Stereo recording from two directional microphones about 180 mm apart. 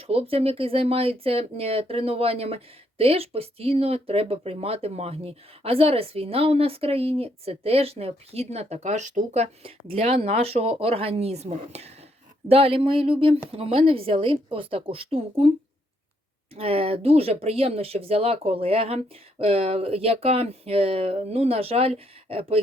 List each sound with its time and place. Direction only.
0.0 s speech: 30° right (ahead or behind)
16.6 s speech: 30° right (ahead or behind)